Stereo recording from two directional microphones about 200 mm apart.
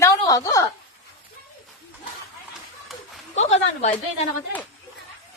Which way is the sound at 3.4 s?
35° left (ahead or behind).